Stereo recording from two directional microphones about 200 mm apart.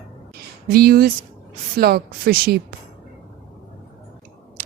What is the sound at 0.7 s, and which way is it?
Speech, 50° right (ahead or behind).